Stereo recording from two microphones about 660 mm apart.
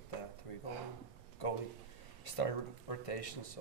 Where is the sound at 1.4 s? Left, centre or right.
Left.